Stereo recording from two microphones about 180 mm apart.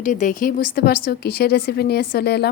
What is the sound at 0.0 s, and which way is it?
Speech, 45° left (ahead or behind).